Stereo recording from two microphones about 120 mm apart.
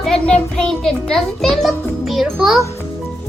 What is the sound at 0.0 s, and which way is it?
A child's voice, 5° left (ahead or behind).